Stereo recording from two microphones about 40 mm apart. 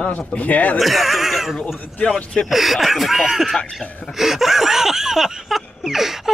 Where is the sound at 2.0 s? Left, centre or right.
Left.